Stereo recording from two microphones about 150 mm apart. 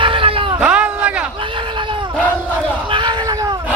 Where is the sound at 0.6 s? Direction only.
10° right (ahead or behind).